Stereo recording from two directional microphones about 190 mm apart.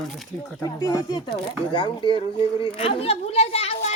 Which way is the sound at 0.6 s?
20° left (ahead or behind).